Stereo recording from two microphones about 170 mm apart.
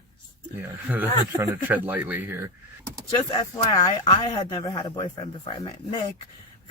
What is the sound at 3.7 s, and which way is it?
Speech, 25° left (ahead or behind).